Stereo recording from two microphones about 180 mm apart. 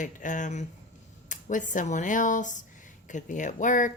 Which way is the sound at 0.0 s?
45° left (ahead or behind).